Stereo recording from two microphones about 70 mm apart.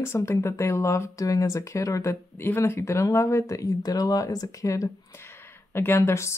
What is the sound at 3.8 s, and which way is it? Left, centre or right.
Speech, left.